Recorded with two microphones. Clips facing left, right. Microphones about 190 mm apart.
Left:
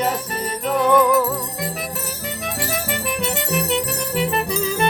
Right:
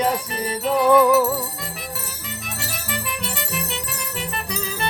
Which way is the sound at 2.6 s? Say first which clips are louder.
Left 9 dB; 55° left (ahead or behind).